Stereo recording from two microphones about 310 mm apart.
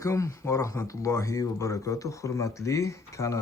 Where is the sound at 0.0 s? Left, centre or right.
Centre.